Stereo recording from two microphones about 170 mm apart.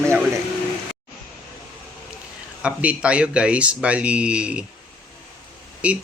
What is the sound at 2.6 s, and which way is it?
Speech, 5° right (ahead or behind).